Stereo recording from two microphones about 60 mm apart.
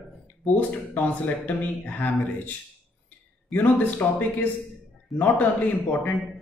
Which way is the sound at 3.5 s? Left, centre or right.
Left.